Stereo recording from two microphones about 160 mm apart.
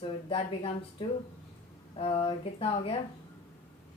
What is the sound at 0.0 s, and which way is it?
A woman's voice, 35° left (ahead or behind).